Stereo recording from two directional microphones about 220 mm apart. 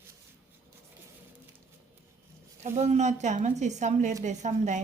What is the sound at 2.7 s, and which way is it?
Speech, 30° right (ahead or behind).